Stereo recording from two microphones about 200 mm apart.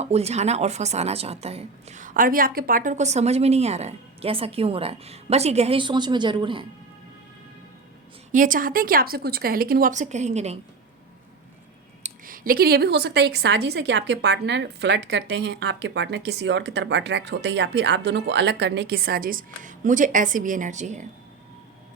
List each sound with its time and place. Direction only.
0.0 s a woman's voice: 30° right (ahead or behind)
8.3 s speech: 40° right (ahead or behind)
12.0 s a woman's voice: 45° right (ahead or behind)